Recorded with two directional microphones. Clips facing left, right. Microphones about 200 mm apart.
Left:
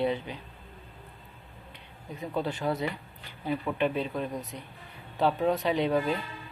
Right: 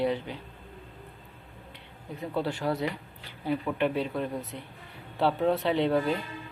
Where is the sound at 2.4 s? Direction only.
20° left (ahead or behind).